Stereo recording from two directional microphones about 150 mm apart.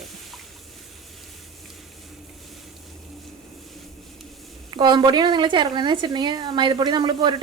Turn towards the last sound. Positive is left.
turn(degrees=-30)  # may be behind; listen again after turning